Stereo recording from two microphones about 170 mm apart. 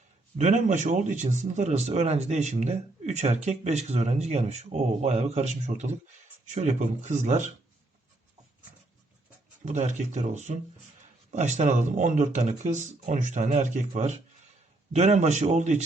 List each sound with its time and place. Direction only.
0.3 s speech: 45° right (ahead or behind)
9.6 s speech: 45° right (ahead or behind)